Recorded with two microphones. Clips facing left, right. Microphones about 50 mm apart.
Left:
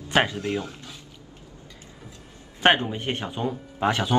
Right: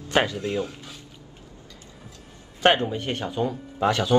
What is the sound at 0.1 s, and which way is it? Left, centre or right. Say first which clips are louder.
Speech: even; left.